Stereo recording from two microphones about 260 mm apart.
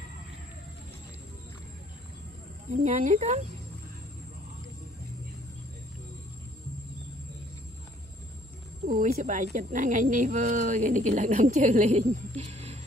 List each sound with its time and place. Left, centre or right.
2.7 s speech: right
8.8 s speech: right